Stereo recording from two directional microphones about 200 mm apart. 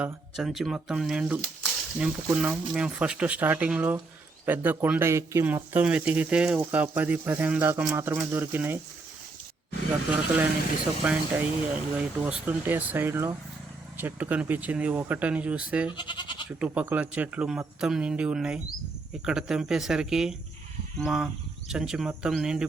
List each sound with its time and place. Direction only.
0.0 s speech: centre (ahead or behind)
11.0 s speech: 5° right (ahead or behind)
15.9 s goat: 25° left (ahead or behind)
16.6 s speech: 10° right (ahead or behind)